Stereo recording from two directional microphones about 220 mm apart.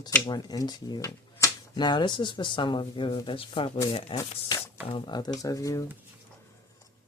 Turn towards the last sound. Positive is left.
turn(degrees=15)  # may be behind; listen again after turning